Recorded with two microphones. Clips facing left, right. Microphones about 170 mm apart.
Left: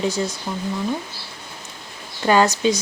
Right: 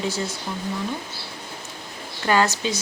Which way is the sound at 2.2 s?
20° left (ahead or behind).